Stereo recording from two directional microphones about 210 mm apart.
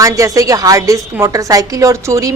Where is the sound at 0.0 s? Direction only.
15° right (ahead or behind).